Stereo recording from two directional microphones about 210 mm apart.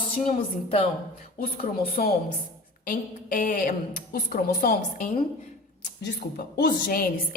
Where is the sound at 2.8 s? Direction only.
40° left (ahead or behind).